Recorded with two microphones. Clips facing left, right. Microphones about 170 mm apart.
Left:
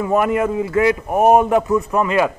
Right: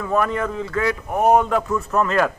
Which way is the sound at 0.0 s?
20° left (ahead or behind).